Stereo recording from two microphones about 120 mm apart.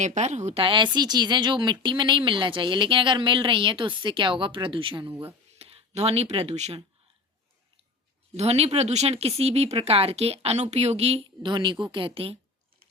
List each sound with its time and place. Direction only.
0.0 s speech: 75° right (ahead or behind); by 5.1 s 45° right (ahead or behind)
5.5 s speech: 55° right (ahead or behind)
8.4 s speech: 60° right (ahead or behind)
11.4 s speech: 40° right (ahead or behind)